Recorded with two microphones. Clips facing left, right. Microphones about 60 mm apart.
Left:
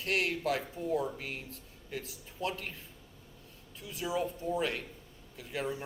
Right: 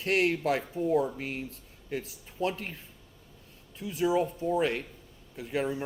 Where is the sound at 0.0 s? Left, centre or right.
Right.